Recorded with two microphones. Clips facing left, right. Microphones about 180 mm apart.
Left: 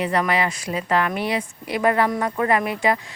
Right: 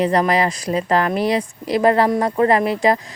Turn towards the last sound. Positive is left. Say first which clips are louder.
# right 5 dB
turn(degrees=-35)  # may be behind; listen again after turning